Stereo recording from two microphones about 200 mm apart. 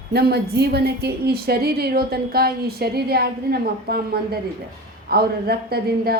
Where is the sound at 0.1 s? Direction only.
50° right (ahead or behind).